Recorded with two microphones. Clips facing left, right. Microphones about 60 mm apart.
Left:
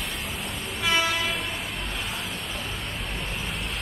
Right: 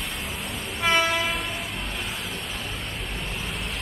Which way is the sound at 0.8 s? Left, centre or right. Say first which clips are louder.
Right 3 dB; right.